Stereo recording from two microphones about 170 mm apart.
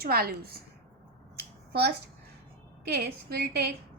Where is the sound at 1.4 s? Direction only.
75° right (ahead or behind).